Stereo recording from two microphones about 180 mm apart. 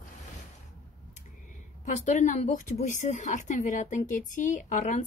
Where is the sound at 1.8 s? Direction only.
45° left (ahead or behind).